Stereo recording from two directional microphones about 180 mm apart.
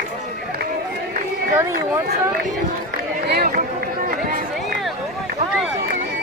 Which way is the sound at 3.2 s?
60° right (ahead or behind).